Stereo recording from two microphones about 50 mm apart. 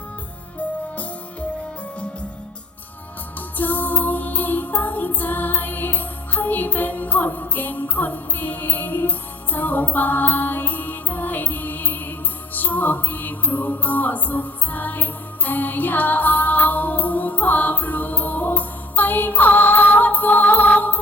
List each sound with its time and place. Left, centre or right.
3.6 s music: left